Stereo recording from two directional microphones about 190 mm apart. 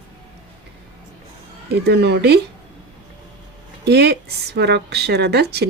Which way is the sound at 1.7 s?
60° right (ahead or behind).